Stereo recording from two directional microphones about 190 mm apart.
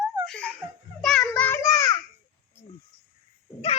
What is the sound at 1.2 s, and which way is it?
Child singing, 10° left (ahead or behind).